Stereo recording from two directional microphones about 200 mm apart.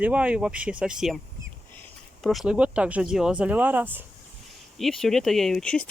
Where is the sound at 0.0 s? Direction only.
5° right (ahead or behind).